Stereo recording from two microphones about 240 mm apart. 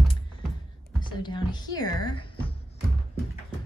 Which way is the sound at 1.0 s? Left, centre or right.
Centre.